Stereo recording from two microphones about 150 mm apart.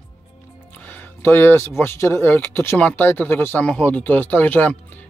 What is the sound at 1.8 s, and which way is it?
Speech, 15° left (ahead or behind).